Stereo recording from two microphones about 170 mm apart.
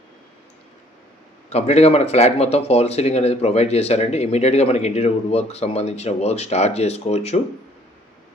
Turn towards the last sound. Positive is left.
turn(degrees=40)  # may be behind; listen again after turning